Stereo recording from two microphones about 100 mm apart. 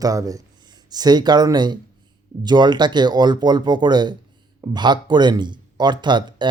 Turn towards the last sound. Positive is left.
turn(degrees=-50)  # may be behind; listen again after turning